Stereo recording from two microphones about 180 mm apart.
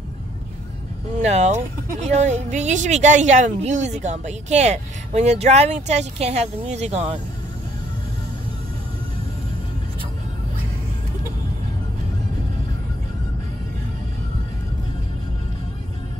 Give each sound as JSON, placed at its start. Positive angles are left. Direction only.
{"t": 1.2, "sound": "a woman's voice", "side_deg": -40}